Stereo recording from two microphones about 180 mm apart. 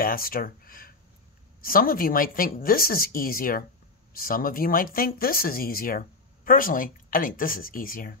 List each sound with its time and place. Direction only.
0.0 s speech: 55° left (ahead or behind)